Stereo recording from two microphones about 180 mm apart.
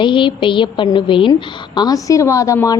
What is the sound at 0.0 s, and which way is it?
A woman's voice, 25° left (ahead or behind).